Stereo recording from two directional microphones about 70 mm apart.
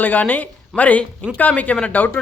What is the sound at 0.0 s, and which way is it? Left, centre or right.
Speech, left.